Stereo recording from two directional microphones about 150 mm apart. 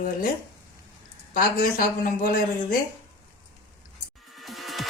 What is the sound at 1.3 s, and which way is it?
Speech, 75° left (ahead or behind).